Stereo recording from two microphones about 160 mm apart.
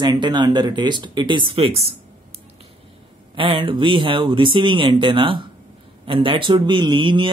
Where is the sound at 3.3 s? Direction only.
30° right (ahead or behind).